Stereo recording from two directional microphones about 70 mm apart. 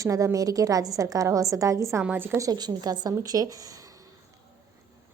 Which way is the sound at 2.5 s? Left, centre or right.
Right.